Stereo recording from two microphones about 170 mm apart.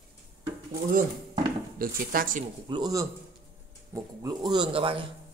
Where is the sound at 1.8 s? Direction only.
55° right (ahead or behind).